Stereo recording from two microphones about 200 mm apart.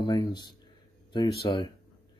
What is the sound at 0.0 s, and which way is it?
Speech, 20° left (ahead or behind).